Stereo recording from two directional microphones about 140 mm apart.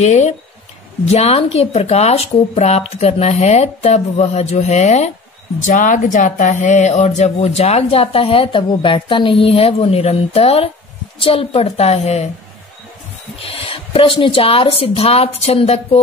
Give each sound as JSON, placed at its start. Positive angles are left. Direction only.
{"t": 0.0, "sound": "speech", "side_deg": 55}
{"t": 5.6, "sound": "speech", "side_deg": 65}
{"t": 13.4, "sound": "speech", "side_deg": 40}